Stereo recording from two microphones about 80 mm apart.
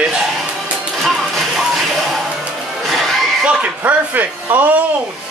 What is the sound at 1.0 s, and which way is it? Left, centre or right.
Music, centre.